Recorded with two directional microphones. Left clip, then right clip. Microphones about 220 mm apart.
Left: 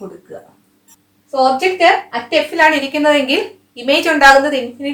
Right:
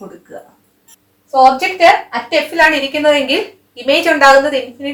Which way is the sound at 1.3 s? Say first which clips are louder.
Right 4 dB; 15° left (ahead or behind).